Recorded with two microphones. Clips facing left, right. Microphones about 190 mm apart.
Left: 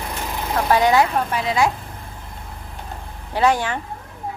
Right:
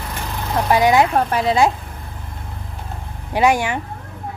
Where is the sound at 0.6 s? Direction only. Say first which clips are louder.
Right 2 dB; 15° right (ahead or behind).